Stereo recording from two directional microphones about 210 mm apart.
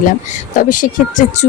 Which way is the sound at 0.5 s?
40° left (ahead or behind).